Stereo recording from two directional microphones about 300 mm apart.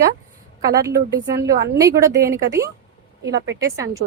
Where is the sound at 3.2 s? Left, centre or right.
Right.